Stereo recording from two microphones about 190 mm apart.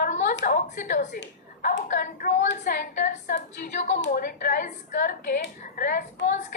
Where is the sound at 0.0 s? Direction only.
40° left (ahead or behind).